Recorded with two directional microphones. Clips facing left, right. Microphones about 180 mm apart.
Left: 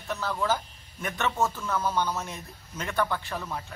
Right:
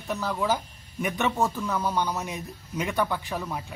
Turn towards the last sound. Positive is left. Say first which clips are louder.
# right 2 dB
turn(degrees=-10)  # may be behind; listen again after turning